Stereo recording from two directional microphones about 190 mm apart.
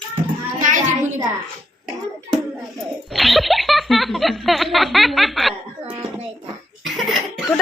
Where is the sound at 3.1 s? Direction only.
Centre (ahead or behind).